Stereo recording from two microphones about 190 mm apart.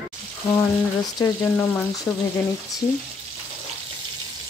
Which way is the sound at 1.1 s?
15° left (ahead or behind).